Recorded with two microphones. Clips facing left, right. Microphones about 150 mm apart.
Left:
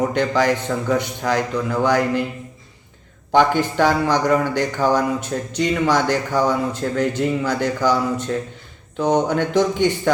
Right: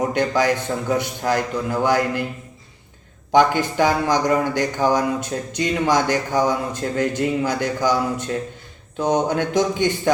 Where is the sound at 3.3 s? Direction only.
10° right (ahead or behind).